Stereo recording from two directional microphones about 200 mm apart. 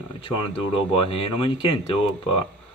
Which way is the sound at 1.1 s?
25° left (ahead or behind).